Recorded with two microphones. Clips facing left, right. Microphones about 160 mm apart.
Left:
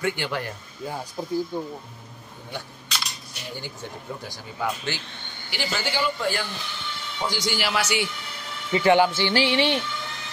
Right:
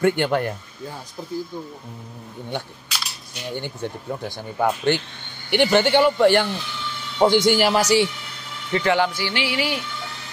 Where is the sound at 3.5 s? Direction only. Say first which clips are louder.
Right 7 dB; 60° right (ahead or behind).